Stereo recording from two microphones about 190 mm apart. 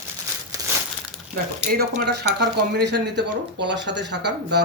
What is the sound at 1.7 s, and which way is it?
Speech, 55° right (ahead or behind).